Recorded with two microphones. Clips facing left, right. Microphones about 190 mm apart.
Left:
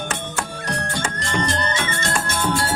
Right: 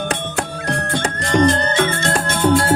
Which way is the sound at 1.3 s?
55° right (ahead or behind).